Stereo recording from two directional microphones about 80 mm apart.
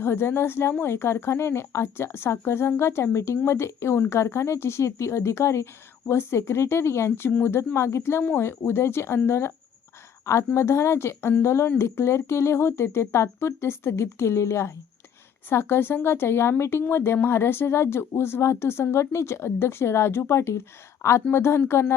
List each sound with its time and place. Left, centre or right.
0.0 s speech: left